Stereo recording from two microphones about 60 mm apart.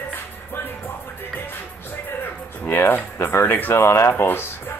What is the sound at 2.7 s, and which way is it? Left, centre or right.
Speech, left.